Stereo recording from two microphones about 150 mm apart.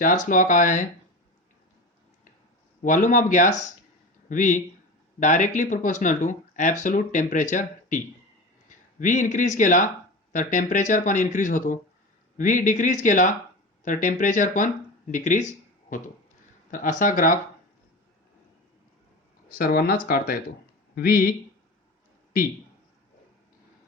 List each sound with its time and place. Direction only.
0.0 s speech: 60° left (ahead or behind)
2.8 s speech: 60° left (ahead or behind)
19.5 s speech: 75° left (ahead or behind)